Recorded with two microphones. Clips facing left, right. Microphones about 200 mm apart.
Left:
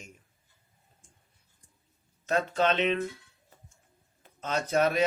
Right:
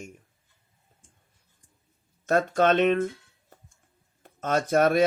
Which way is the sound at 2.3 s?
50° right (ahead or behind).